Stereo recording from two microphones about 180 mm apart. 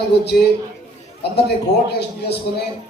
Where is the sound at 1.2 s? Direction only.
65° left (ahead or behind).